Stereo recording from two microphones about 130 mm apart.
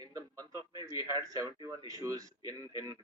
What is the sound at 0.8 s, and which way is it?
Speech, 25° right (ahead or behind).